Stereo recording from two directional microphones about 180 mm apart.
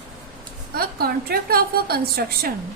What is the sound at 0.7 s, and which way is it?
A woman's voice, 55° right (ahead or behind).